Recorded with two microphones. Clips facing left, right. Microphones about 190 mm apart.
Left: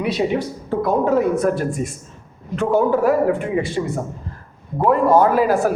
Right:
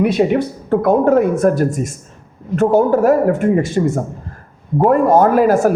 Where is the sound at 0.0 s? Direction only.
55° right (ahead or behind).